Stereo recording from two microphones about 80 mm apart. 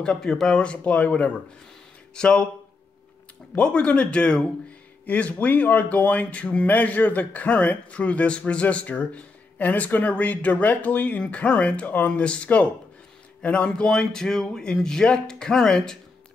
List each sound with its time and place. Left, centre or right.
0.0 s speech: centre
3.5 s speech: centre